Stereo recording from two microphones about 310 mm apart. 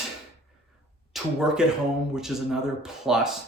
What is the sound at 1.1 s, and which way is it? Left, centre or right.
Speech, centre.